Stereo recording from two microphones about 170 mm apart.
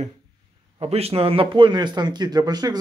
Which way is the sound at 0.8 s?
35° right (ahead or behind).